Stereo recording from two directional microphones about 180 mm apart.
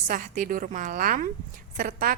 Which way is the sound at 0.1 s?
45° right (ahead or behind).